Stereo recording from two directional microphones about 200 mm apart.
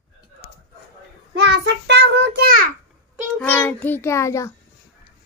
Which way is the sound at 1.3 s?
55° right (ahead or behind).